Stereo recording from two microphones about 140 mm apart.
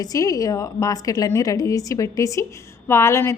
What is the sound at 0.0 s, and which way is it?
A woman's voice, 25° left (ahead or behind).